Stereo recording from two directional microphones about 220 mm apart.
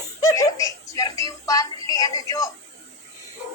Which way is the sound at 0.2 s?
15° left (ahead or behind).